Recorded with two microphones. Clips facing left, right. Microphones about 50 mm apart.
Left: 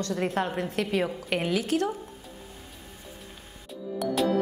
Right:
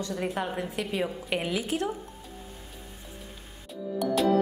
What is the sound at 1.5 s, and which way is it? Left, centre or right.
Speech, centre.